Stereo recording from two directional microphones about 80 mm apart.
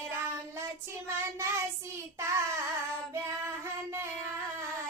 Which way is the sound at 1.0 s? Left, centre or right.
Right.